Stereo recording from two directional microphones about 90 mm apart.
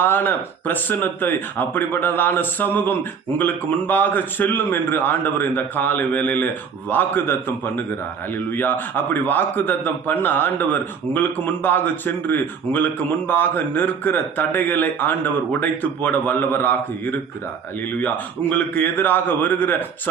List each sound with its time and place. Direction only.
0.0 s a man's voice: 25° left (ahead or behind)